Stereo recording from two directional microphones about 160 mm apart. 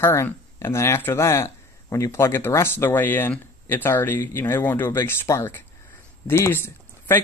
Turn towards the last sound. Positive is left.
turn(degrees=15)  # may be behind; listen again after turning